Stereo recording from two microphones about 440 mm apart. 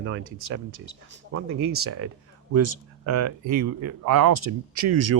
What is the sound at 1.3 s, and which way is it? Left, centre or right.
Speech, right.